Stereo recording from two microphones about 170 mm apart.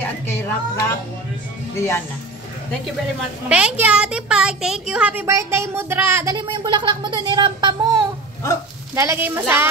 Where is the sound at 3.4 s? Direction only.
5° right (ahead or behind).